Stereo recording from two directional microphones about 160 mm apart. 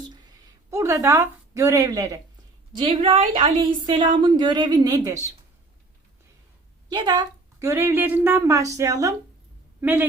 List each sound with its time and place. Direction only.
0.7 s a woman's voice: 15° right (ahead or behind)
2.7 s a woman's voice: 35° right (ahead or behind)
6.9 s a woman's voice: 25° right (ahead or behind)